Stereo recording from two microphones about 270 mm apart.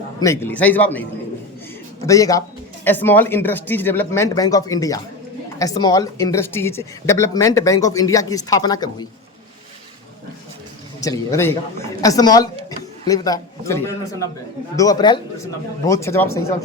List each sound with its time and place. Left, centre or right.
0.2 s speech: centre
2.0 s speech: centre
11.0 s speech: centre